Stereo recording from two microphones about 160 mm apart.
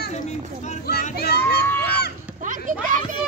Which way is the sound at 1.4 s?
10° left (ahead or behind).